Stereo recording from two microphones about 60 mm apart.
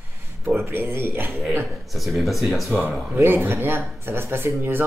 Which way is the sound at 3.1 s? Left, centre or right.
Right.